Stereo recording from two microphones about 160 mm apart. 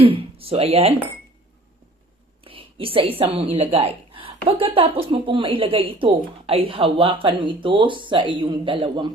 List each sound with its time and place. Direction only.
0.0 s speech: 35° right (ahead or behind)
2.4 s a woman's voice: 35° right (ahead or behind)